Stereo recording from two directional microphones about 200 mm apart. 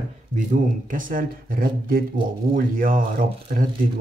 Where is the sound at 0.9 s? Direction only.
45° right (ahead or behind).